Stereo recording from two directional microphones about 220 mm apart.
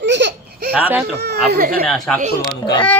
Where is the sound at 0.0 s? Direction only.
50° right (ahead or behind).